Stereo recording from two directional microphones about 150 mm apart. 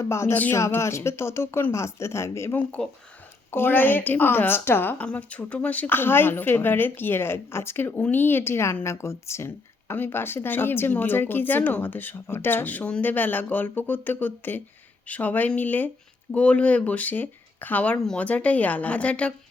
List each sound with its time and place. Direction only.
0.0 s a woman's voice: 20° left (ahead or behind)